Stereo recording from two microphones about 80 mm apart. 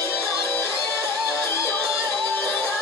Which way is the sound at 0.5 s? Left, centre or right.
Left.